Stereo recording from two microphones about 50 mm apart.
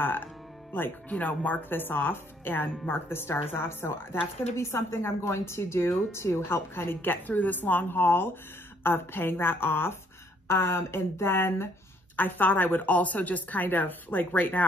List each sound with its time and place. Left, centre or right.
1.0 s a woman's voice: left
12.2 s a woman's voice: left